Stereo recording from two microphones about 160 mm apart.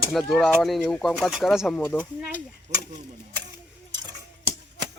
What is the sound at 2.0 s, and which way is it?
Speech, 10° right (ahead or behind).